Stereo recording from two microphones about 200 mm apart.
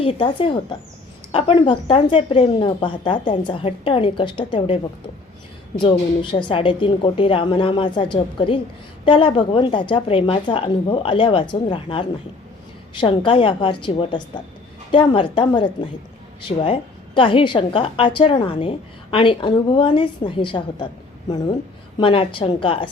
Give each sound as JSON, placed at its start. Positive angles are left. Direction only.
{"t": 0.0, "sound": "a woman's voice", "side_deg": 25}
{"t": 5.8, "sound": "a woman's voice", "side_deg": 25}